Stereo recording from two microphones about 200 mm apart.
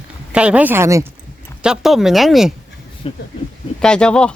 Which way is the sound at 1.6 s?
5° right (ahead or behind).